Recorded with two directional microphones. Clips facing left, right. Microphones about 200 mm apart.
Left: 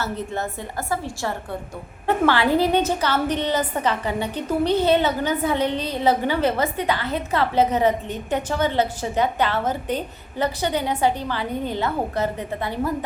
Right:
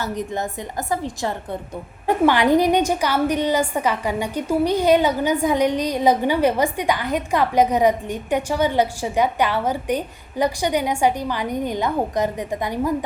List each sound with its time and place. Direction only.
0.0 s a woman's voice: 15° right (ahead or behind)